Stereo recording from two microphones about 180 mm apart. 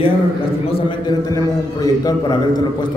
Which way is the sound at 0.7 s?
30° left (ahead or behind).